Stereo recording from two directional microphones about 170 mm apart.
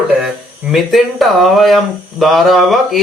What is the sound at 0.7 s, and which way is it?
Speech, centre (ahead or behind).